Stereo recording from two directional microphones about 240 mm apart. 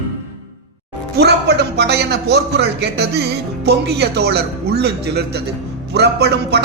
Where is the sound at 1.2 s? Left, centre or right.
Right.